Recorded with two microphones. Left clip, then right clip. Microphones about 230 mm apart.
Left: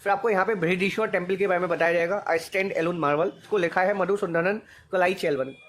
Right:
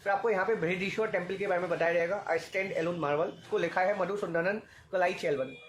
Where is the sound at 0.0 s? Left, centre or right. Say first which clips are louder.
Left 6 dB; left.